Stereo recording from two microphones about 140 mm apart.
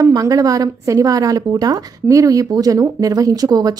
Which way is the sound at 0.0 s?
25° right (ahead or behind).